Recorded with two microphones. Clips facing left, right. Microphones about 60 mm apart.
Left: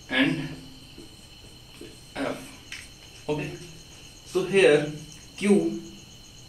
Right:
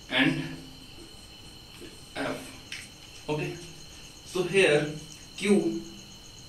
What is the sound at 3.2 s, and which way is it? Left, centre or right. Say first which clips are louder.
Cricket: left 2 dB; centre.